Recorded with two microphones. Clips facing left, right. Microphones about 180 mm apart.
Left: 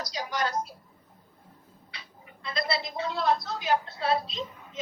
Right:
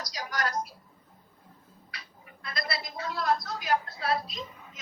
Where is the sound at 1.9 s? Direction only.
25° left (ahead or behind).